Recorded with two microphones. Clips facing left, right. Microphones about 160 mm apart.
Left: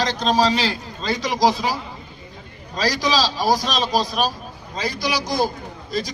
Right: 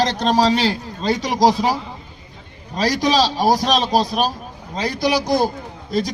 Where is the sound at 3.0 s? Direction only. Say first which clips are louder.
Right 6 dB; 60° right (ahead or behind).